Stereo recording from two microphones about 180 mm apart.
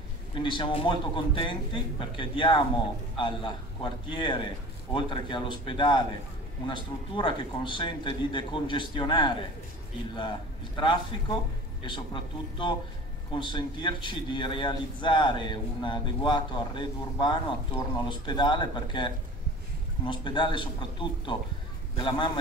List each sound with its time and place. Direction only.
0.3 s a man's voice: 25° left (ahead or behind)
10.8 s a man's voice: 25° left (ahead or behind)